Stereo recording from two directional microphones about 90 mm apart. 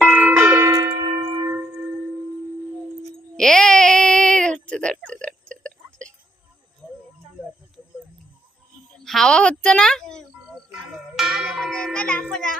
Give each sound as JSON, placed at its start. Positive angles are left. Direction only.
{"t": 0.0, "sound": "church bell", "side_deg": -15}
{"t": 0.6, "sound": "church bell", "side_deg": -45}
{"t": 3.3, "sound": "a sound", "side_deg": 5}
{"t": 6.8, "sound": "a sound", "side_deg": -15}
{"t": 9.0, "sound": "a woman's voice", "side_deg": 5}
{"t": 11.2, "sound": "tubular bells", "side_deg": 0}